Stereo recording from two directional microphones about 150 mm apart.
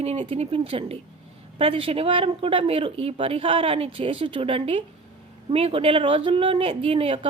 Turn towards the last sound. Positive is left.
turn(degrees=-35)  # may be behind; listen again after turning